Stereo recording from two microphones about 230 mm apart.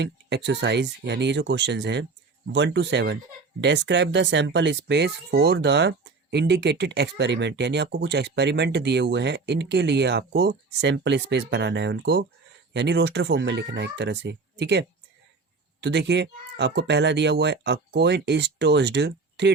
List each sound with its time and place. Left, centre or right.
0.0 s speech: right